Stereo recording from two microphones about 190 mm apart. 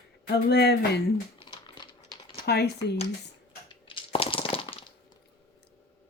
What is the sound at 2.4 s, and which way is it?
Speech, 60° left (ahead or behind).